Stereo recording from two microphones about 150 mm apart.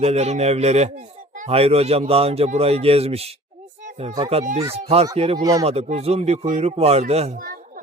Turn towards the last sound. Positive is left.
turn(degrees=-45)  # may be behind; listen again after turning